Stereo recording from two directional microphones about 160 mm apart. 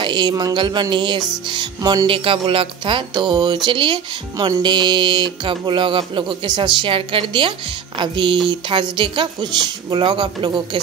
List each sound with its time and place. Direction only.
0.0 s a woman's voice: 30° right (ahead or behind)